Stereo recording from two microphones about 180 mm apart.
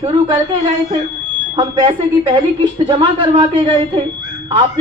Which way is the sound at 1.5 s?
25° right (ahead or behind).